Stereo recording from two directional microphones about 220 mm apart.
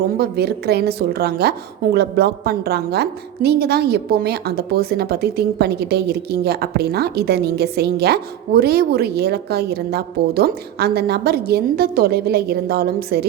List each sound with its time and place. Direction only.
0.0 s a woman's voice: 45° right (ahead or behind)